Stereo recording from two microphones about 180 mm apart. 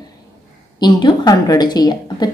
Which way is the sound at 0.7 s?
25° left (ahead or behind).